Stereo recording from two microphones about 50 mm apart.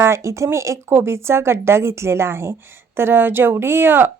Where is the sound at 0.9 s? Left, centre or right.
Right.